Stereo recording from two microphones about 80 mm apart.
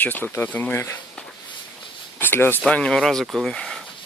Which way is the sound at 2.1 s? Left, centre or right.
Left.